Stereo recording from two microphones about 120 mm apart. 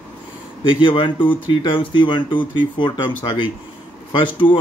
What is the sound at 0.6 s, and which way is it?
Speech, 45° left (ahead or behind).